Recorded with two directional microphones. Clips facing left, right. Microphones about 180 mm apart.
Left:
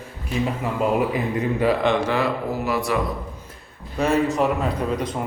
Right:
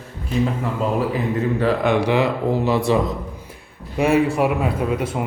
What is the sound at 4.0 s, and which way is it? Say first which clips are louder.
A man's voice: right 3 dB; 10° right (ahead or behind).